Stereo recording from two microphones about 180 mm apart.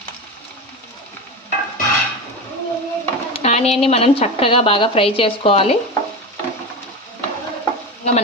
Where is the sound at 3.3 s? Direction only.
35° left (ahead or behind).